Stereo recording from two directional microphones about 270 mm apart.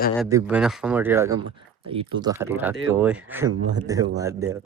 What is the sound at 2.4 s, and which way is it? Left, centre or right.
Speech, centre.